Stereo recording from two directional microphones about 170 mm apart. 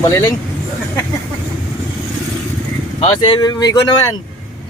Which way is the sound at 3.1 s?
25° left (ahead or behind).